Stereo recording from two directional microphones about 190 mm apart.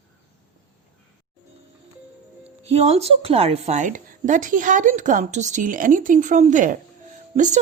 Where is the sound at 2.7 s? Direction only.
35° right (ahead or behind).